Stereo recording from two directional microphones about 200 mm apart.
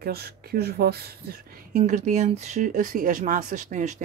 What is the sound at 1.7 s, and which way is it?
Speech, 35° right (ahead or behind).